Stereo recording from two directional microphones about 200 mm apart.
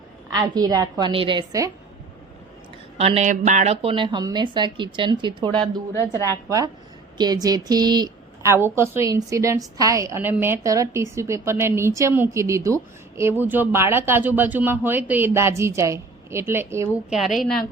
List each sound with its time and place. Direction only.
0.3 s speech: 20° right (ahead or behind)
3.0 s speech: 30° right (ahead or behind)
5.9 s a woman's voice: 15° left (ahead or behind)
7.2 s a woman's voice: 20° right (ahead or behind)
17.1 s a woman's voice: centre (ahead or behind)